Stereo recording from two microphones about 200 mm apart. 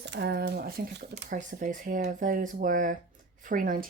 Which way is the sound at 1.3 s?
40° right (ahead or behind).